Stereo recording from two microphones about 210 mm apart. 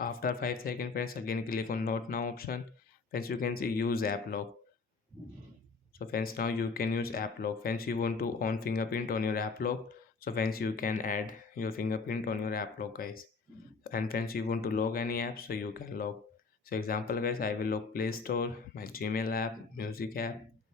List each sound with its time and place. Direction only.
0.0 s speech: 45° left (ahead or behind)
6.1 s speech: 45° left (ahead or behind)